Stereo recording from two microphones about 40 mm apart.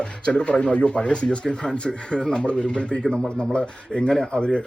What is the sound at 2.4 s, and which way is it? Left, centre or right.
Speech, left.